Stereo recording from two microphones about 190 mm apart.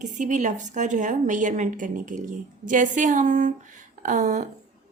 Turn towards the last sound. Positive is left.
turn(degrees=-40)  # may be behind; listen again after turning